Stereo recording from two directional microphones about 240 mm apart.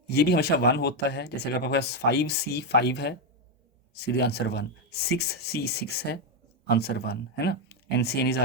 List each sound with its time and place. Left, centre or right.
0.1 s speech: left